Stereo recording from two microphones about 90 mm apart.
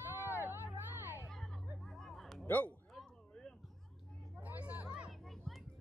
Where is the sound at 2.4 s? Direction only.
20° left (ahead or behind).